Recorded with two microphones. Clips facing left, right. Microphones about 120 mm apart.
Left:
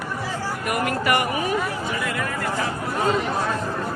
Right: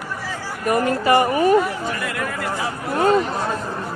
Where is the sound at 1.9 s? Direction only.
Centre (ahead or behind).